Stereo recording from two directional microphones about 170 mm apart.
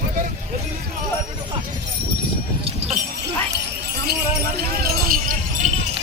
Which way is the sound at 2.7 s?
35° right (ahead or behind).